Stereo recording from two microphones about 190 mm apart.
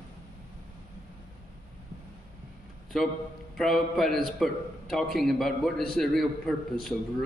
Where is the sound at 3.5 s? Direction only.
Centre (ahead or behind).